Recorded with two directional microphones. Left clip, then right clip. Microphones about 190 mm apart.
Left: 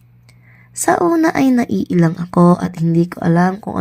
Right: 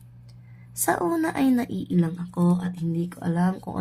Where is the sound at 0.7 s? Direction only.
30° left (ahead or behind).